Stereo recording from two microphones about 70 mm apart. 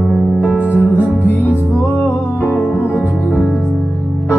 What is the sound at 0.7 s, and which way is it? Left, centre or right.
Music, left.